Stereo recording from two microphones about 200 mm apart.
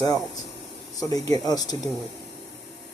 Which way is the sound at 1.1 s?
15° left (ahead or behind).